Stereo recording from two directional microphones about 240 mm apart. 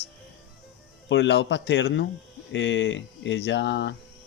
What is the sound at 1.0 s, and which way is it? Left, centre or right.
Speech, left.